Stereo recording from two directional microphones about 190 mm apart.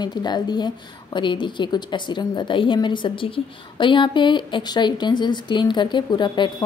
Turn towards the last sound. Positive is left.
turn(degrees=25)  # may be behind; listen again after turning